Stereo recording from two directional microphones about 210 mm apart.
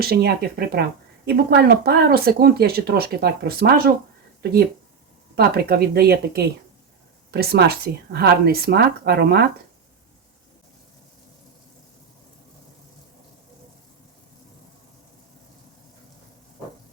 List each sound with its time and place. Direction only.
0.0 s a woman's voice: 50° right (ahead or behind)
5.4 s a woman's voice: 45° right (ahead or behind)